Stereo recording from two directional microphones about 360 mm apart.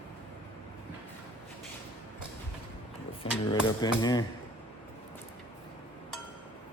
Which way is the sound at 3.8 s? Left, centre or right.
Centre.